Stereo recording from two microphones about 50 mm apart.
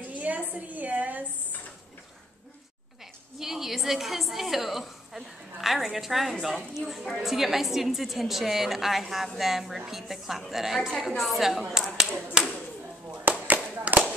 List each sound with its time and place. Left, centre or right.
0.1 s a woman's voice: right
3.3 s a woman's voice: centre
13.3 s a sound: right